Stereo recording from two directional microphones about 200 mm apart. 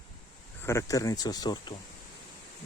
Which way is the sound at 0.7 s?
15° left (ahead or behind).